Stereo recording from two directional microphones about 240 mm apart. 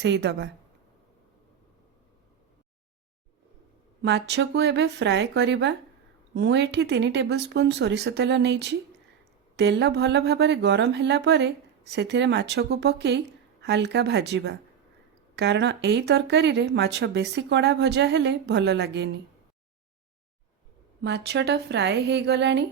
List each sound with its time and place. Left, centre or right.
0.0 s speech: right
4.0 s speech: right
21.0 s speech: right